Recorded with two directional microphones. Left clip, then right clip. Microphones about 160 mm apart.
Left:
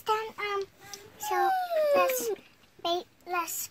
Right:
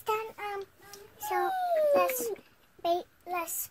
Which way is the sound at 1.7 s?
Centre (ahead or behind).